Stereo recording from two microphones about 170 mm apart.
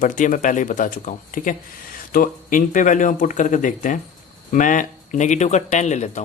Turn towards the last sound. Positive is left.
turn(degrees=45)  # may be behind; listen again after turning